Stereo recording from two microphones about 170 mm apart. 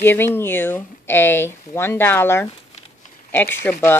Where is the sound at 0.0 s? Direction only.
15° left (ahead or behind).